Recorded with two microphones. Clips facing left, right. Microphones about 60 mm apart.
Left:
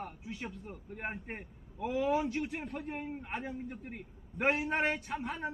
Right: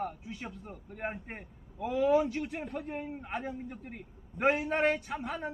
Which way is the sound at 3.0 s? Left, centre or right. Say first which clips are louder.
Right 2 dB; centre.